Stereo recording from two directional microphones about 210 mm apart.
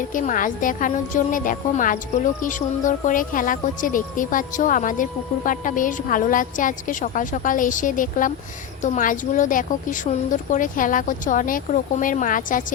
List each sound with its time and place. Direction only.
0.1 s a woman's voice: 40° left (ahead or behind)